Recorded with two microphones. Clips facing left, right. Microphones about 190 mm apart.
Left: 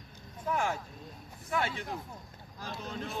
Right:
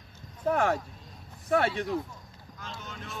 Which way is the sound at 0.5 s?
60° right (ahead or behind).